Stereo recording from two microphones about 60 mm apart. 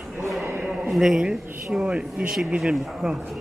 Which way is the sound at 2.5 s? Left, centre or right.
Centre.